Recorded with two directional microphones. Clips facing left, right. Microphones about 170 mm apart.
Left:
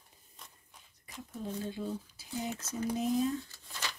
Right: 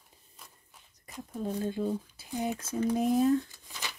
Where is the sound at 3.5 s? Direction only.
15° right (ahead or behind).